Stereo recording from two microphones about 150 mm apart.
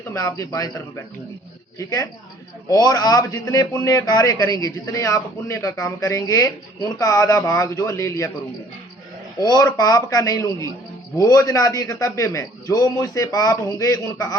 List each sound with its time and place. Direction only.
0.1 s a man's voice: 20° left (ahead or behind)
9.4 s a man's voice: 25° left (ahead or behind)